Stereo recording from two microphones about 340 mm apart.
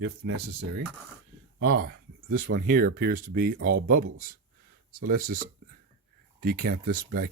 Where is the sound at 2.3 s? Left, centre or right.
Right.